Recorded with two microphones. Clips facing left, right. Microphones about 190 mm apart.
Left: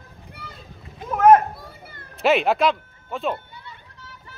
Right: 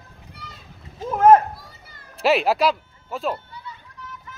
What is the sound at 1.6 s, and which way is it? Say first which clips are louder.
Children playing: left 5 dB; 60° left (ahead or behind).